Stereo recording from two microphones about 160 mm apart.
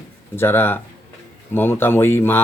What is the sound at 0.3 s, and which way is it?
Speech, 15° left (ahead or behind).